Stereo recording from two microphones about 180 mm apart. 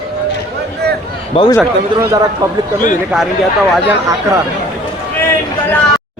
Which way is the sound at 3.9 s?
15° right (ahead or behind).